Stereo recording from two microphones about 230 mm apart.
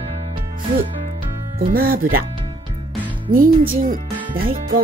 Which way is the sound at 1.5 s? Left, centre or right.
Right.